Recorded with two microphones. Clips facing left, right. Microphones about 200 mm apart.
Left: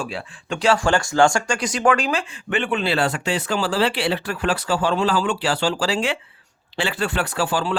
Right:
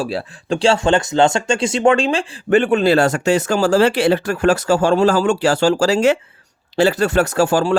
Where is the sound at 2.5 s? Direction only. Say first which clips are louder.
Right 9 dB; 40° right (ahead or behind).